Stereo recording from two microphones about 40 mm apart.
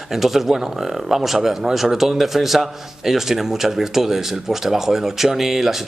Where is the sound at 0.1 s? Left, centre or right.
Centre.